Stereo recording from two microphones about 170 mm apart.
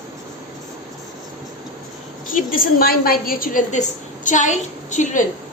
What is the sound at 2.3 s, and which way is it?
A woman's voice, 55° left (ahead or behind).